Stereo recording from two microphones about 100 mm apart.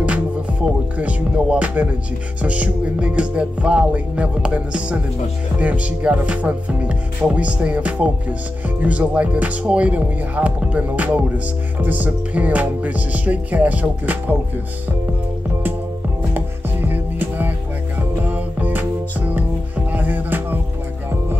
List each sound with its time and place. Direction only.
0.0 s music: 10° right (ahead or behind)
16.3 s music: 20° right (ahead or behind)